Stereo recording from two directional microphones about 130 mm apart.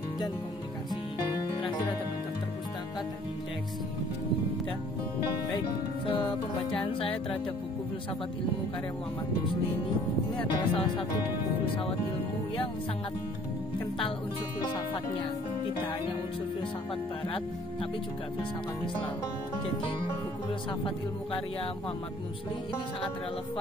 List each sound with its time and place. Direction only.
6.0 s speech: 45° left (ahead or behind)
10.3 s speech: 40° left (ahead or behind)